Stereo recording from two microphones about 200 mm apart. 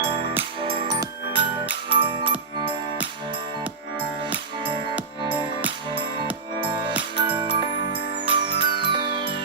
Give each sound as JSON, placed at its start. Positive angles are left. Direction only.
{"t": 0.0, "sound": "music", "side_deg": -30}
{"t": 6.6, "sound": "music", "side_deg": -25}